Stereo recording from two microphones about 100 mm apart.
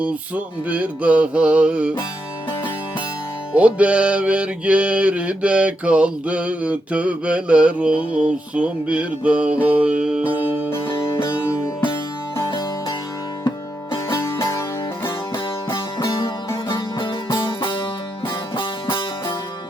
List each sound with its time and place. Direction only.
0.0 s music: 15° right (ahead or behind)
3.5 s music: 15° right (ahead or behind)
11.1 s music: 25° left (ahead or behind)
16.6 s music: 55° left (ahead or behind)